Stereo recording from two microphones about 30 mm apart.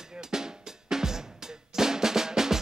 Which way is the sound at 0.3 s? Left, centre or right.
Centre.